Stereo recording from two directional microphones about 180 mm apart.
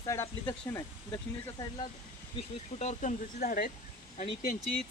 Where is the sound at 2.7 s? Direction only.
40° left (ahead or behind).